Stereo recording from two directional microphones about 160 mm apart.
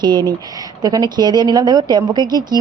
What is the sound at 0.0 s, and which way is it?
Speech, 25° right (ahead or behind).